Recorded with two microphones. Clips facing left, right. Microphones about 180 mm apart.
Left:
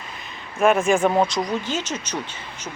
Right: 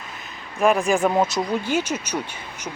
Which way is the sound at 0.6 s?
Centre (ahead or behind).